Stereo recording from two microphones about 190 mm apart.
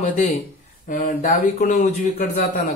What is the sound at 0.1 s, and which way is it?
A man's voice, 35° left (ahead or behind).